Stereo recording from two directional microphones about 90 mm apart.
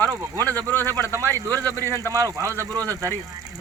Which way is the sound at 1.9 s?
35° right (ahead or behind).